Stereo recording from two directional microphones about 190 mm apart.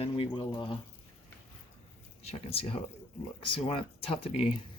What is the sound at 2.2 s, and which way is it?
Speech, 30° left (ahead or behind).